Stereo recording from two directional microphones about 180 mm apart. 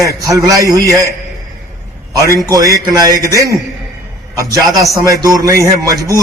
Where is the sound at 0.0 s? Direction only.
20° right (ahead or behind).